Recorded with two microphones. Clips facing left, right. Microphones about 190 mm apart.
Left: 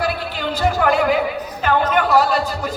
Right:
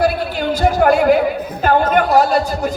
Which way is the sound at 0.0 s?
45° right (ahead or behind).